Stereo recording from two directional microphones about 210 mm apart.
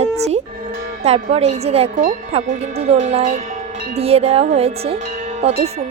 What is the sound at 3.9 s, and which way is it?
Music, 30° right (ahead or behind).